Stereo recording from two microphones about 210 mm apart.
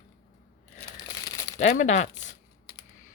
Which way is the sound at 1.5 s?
35° left (ahead or behind).